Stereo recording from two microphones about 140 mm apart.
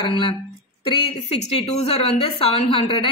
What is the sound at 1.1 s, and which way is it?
A woman's voice, 50° left (ahead or behind).